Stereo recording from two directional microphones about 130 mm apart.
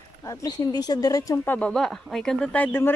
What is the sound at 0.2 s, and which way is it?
Speech, 25° left (ahead or behind).